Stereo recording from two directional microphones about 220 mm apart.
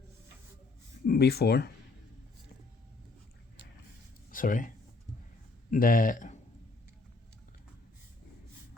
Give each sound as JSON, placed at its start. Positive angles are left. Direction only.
{"t": 1.0, "sound": "speech", "side_deg": 45}
{"t": 4.3, "sound": "speech", "side_deg": 40}
{"t": 5.7, "sound": "speech", "side_deg": 40}